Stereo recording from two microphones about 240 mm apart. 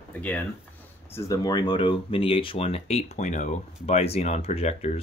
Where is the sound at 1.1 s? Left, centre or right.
Centre.